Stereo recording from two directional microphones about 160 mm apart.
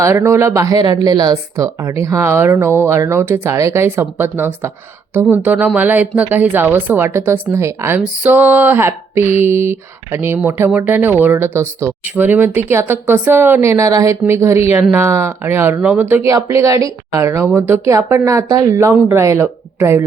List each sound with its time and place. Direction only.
0.0 s speech: 15° right (ahead or behind)